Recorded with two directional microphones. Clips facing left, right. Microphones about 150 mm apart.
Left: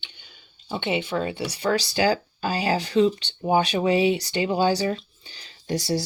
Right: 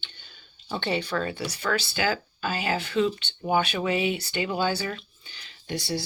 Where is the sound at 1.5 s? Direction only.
30° left (ahead or behind).